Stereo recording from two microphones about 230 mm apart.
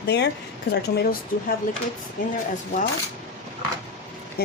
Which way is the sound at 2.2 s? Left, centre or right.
Left.